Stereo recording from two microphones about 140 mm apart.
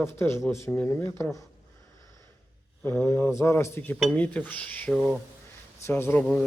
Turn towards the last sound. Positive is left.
turn(degrees=10)  # may be behind; listen again after turning